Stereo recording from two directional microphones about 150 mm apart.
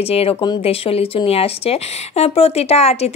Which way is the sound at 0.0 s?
40° left (ahead or behind).